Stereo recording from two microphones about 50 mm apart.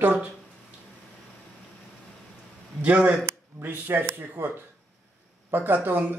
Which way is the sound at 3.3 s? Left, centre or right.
Right.